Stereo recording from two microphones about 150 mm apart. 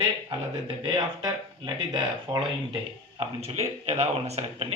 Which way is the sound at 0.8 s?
30° right (ahead or behind).